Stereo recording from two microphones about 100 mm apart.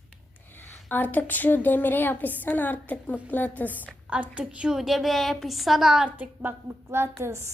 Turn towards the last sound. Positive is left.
turn(degrees=-30)  # may be behind; listen again after turning